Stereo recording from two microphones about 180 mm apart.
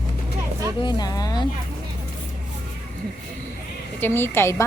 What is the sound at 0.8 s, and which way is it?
Speech, 25° left (ahead or behind).